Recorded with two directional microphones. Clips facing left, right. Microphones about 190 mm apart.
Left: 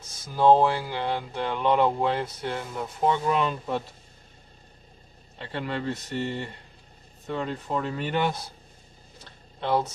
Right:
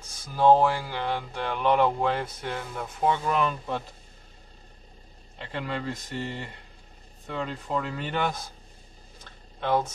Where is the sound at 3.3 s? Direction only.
30° left (ahead or behind).